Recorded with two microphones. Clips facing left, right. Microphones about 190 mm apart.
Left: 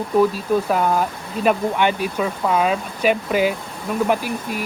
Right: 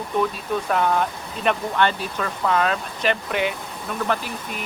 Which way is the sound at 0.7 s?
5° left (ahead or behind).